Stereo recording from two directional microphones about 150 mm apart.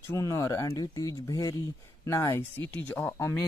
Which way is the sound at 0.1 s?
20° left (ahead or behind).